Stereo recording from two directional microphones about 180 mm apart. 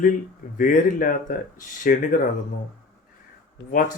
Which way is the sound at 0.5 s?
45° left (ahead or behind).